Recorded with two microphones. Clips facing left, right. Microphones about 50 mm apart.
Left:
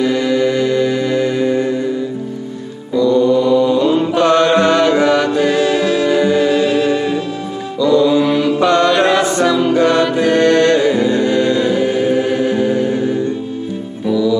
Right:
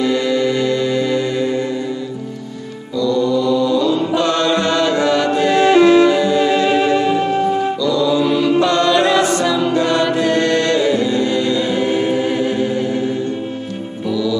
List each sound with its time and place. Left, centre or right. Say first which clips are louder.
0.0 s music: left 2 dB; centre
3.0 s chant: left 4 dB; left
5.6 s music: right 5 dB; right
6.0 s music: left 1 dB; centre
7.8 s mantra: left 7 dB; left
8.5 s music: left 3 dB; centre
9.2 s music: left 2 dB; centre
10.1 s music: left 4 dB; centre
12.5 s music: left 3 dB; centre
14.0 s music: left 4 dB; centre